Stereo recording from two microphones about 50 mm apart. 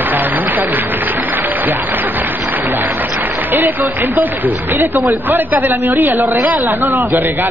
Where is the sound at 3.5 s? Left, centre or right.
Right.